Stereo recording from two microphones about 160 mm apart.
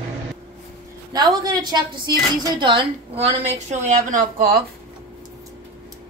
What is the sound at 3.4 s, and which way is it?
A woman's voice, 50° right (ahead or behind).